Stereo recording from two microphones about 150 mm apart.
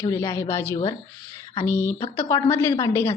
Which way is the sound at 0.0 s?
20° left (ahead or behind).